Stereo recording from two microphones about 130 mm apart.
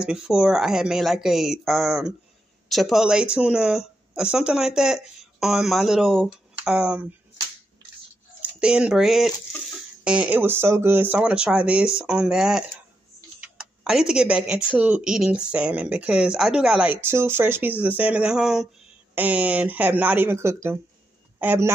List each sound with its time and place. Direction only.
0.0 s speech: 5° right (ahead or behind)
8.4 s speech: 10° right (ahead or behind)